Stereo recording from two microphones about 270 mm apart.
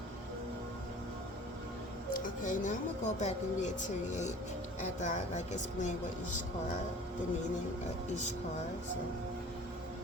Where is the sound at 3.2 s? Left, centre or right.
Left.